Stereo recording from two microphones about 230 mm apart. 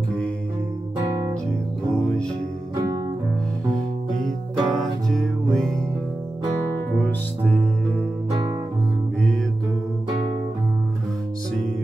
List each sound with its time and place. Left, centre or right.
4.6 s music: centre
7.0 s music: centre
8.3 s guitar: centre